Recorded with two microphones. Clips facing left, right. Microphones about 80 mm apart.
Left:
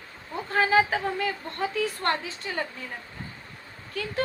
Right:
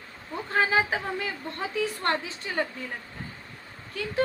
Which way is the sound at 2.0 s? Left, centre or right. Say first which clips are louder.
Even; right.